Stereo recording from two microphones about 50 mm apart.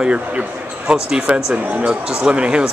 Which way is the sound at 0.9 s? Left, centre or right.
Centre.